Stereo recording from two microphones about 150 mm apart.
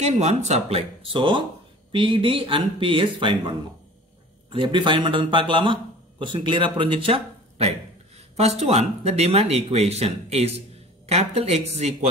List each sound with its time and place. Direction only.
0.0 s a man's voice: 50° right (ahead or behind)